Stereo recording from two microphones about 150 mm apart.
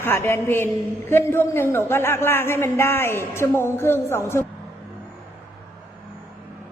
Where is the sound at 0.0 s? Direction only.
15° left (ahead or behind).